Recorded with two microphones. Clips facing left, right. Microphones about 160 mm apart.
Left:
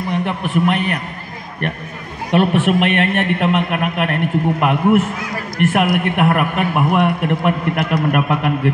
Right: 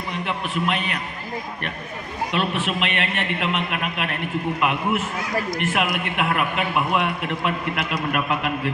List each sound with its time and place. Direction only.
0.1 s a man's voice: 60° left (ahead or behind)
2.3 s a man's voice: 55° left (ahead or behind)